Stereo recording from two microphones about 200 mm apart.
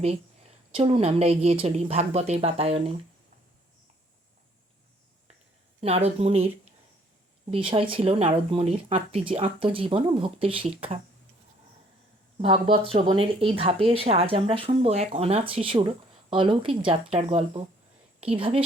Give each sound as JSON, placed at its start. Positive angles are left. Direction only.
{"t": 0.7, "sound": "a woman's voice", "side_deg": -30}
{"t": 5.8, "sound": "a woman's voice", "side_deg": -30}
{"t": 7.5, "sound": "speech", "side_deg": -25}
{"t": 12.4, "sound": "speech", "side_deg": -25}